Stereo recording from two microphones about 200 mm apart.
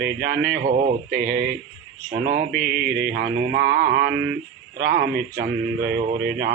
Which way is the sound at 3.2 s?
55° right (ahead or behind).